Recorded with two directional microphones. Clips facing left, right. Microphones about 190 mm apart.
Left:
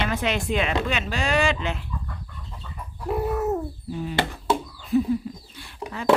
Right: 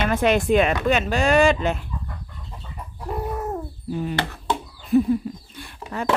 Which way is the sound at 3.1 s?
5° left (ahead or behind).